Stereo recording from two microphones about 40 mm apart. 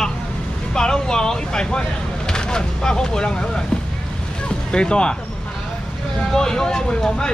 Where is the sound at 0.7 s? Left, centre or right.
Centre.